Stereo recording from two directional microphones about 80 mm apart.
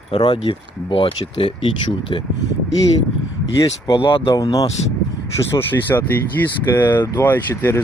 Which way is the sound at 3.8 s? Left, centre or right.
Left.